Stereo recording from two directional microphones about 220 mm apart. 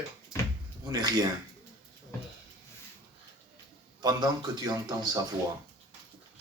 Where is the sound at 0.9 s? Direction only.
15° right (ahead or behind).